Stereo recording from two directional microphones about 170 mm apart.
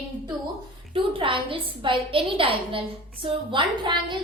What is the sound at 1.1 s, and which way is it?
A woman's voice, 30° right (ahead or behind).